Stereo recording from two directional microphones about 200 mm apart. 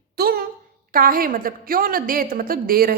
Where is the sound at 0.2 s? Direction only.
45° right (ahead or behind).